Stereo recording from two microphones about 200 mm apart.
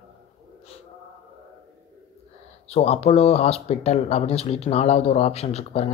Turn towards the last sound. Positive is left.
turn(degrees=30)  # may be behind; listen again after turning